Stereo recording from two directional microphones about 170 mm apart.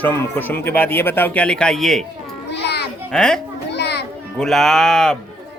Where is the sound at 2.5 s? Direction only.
80° left.